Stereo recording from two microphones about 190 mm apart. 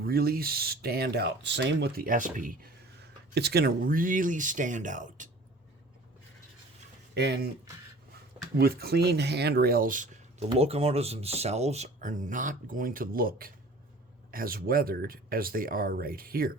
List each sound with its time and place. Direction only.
0.0 s speech: 55° right (ahead or behind)
7.1 s speech: 60° right (ahead or behind)
8.5 s speech: 55° right (ahead or behind)
10.6 s speech: 30° right (ahead or behind); by 16.5 s 50° right (ahead or behind)